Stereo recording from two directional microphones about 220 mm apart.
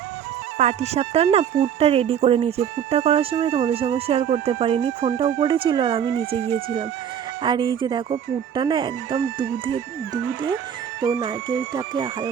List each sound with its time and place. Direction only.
0.6 s speech: 30° right (ahead or behind)
11.0 s speech: 15° right (ahead or behind)